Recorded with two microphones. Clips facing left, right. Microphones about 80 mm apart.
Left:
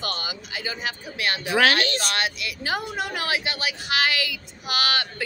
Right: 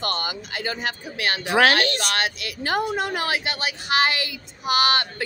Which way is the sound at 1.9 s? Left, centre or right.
Right.